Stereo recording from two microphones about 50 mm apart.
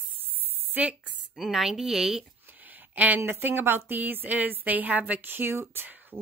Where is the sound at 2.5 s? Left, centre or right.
Right.